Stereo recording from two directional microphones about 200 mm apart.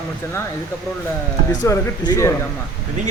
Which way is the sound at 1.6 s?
20° left (ahead or behind).